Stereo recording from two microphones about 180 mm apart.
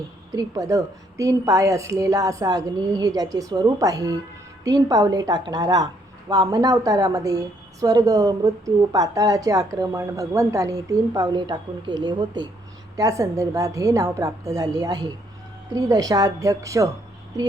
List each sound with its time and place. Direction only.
0.3 s a woman's voice: 20° right (ahead or behind)